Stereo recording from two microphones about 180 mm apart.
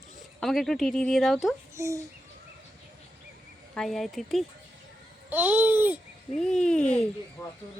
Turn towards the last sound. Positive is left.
turn(degrees=20)  # may be behind; listen again after turning